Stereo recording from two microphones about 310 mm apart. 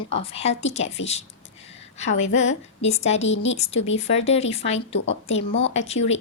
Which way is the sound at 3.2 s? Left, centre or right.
Left.